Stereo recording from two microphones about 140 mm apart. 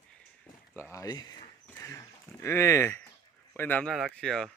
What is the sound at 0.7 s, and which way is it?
Speech, 20° left (ahead or behind).